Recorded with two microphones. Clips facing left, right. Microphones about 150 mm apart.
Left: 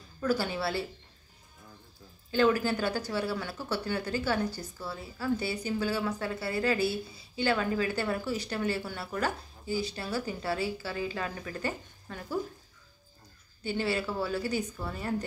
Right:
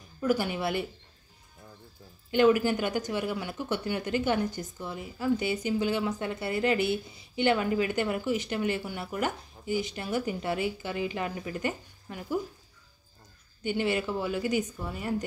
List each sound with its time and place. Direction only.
0.2 s speech: 15° right (ahead or behind)
2.3 s speech: 15° right (ahead or behind)
13.7 s speech: 15° right (ahead or behind)